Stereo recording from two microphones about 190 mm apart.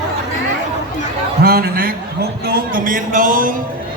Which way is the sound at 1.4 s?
55° right (ahead or behind).